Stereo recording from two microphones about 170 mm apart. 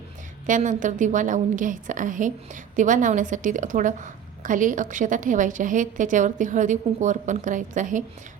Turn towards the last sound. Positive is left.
turn(degrees=-50)  # may be behind; listen again after turning